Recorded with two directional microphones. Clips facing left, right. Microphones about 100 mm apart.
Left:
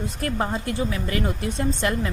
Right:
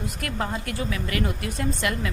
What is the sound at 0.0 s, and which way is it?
A woman's voice, 30° left (ahead or behind).